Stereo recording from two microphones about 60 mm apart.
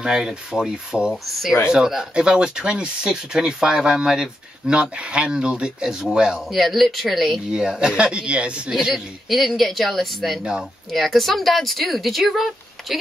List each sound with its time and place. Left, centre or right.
0.0 s speech: centre
1.2 s speech: centre
6.5 s speech: centre
8.9 s speech: centre